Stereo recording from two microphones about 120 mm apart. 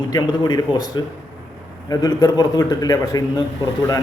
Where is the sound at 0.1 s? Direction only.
35° left (ahead or behind).